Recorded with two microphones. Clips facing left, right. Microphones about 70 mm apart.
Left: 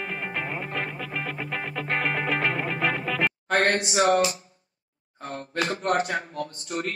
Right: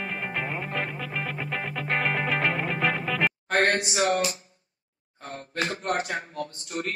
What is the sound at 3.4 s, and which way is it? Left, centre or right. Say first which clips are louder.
Speech: left 1 dB; left.